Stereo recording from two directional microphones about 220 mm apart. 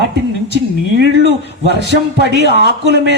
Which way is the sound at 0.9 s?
50° right (ahead or behind).